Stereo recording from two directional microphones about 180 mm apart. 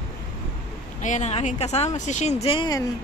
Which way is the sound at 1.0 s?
40° left (ahead or behind).